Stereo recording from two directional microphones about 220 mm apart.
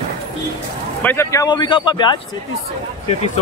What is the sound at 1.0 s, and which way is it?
Speech, 10° left (ahead or behind).